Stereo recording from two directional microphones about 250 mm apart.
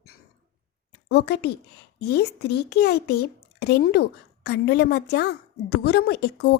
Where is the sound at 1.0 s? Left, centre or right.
Left.